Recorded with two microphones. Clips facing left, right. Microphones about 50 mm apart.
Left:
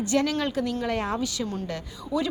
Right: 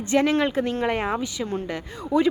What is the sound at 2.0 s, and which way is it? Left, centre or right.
Speech, right.